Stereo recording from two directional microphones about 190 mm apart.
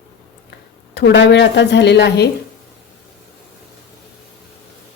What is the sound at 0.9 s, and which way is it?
A woman's voice, 70° left (ahead or behind).